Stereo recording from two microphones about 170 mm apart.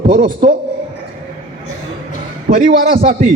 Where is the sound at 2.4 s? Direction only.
55° right (ahead or behind).